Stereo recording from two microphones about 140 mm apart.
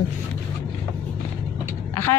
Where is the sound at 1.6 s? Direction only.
15° left (ahead or behind).